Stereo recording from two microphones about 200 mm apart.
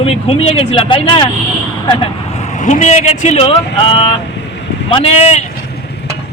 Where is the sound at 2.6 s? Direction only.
35° left (ahead or behind).